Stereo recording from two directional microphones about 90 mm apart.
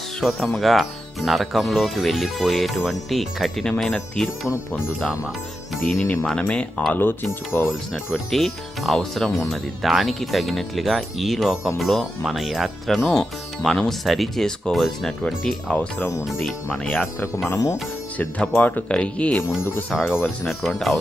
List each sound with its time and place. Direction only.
0.2 s speech: 5° left (ahead or behind)
5.7 s speech: centre (ahead or behind)
6.5 s speech: 10° left (ahead or behind)
7.0 s speech: 25° left (ahead or behind)
7.7 s speech: centre (ahead or behind)
16.2 s speech: centre (ahead or behind)
17.5 s speech: 35° left (ahead or behind)
18.2 s speech: 15° left (ahead or behind)
20.5 s speech: centre (ahead or behind)